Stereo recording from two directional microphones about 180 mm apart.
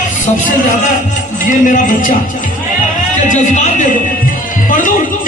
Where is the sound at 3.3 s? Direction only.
45° left (ahead or behind).